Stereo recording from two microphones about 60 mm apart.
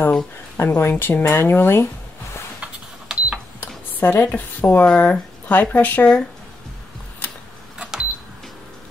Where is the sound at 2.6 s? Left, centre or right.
Centre.